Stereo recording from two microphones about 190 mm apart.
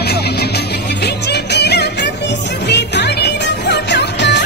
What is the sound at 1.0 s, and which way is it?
Music, 60° left (ahead or behind).